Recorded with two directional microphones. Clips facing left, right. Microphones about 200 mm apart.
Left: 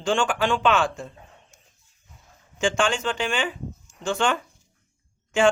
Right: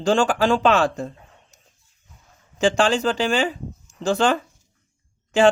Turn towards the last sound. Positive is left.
turn(degrees=-35)  # may be behind; listen again after turning